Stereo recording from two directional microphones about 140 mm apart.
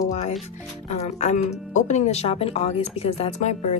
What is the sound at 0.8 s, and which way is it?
Speech, 50° left (ahead or behind).